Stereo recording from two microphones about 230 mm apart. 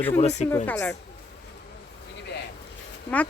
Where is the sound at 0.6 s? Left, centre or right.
Centre.